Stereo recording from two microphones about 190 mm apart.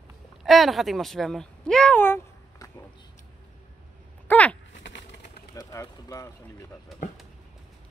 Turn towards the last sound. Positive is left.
turn(degrees=0)  # may be behind; listen again after turning